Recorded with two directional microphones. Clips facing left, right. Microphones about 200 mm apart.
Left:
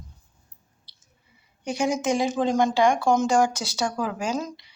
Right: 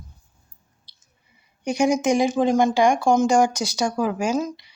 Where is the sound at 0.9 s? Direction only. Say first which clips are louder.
Even; 15° right (ahead or behind).